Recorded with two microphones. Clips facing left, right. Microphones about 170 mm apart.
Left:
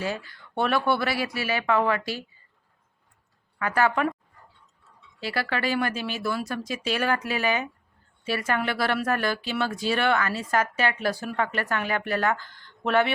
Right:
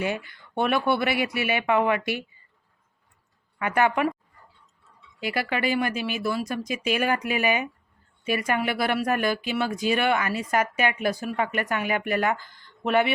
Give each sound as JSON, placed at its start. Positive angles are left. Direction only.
{"t": 0.0, "sound": "speech", "side_deg": -20}
{"t": 3.6, "sound": "speech", "side_deg": -20}
{"t": 5.2, "sound": "speech", "side_deg": -15}
{"t": 6.7, "sound": "speech", "side_deg": -15}